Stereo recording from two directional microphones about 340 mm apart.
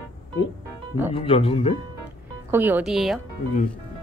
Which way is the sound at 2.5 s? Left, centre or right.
Centre.